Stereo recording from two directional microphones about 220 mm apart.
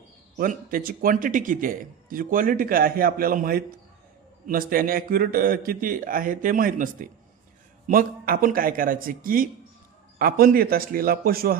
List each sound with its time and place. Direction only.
0.3 s a man's voice: 40° right (ahead or behind)